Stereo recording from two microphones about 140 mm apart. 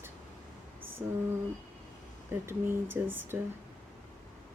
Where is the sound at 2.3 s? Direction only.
15° right (ahead or behind).